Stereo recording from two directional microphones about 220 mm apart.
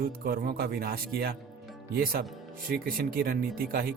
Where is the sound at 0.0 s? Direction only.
40° right (ahead or behind).